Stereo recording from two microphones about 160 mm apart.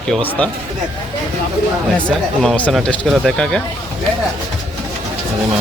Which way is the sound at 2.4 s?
5° left (ahead or behind).